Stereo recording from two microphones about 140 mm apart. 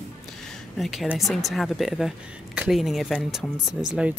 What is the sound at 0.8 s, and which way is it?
Speech, centre (ahead or behind).